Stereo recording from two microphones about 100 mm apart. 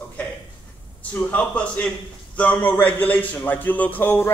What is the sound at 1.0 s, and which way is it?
A man's voice, 15° left (ahead or behind).